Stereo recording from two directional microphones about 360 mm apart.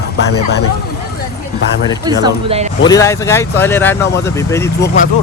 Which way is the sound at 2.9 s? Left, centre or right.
Centre.